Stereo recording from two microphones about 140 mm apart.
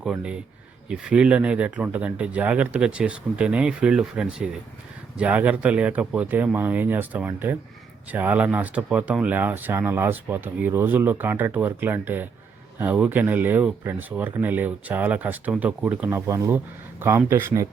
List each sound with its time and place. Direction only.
0.0 s speech: 5° right (ahead or behind)